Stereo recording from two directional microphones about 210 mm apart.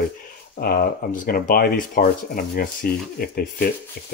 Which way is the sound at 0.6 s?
45° left (ahead or behind).